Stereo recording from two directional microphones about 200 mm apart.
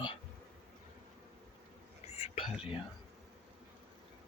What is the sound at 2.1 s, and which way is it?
Whispering, 30° left (ahead or behind).